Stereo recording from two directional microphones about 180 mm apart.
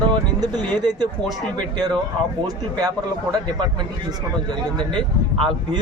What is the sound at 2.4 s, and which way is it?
Speech, 20° right (ahead or behind).